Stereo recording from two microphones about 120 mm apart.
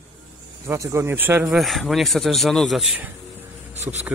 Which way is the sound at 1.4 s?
Centre (ahead or behind).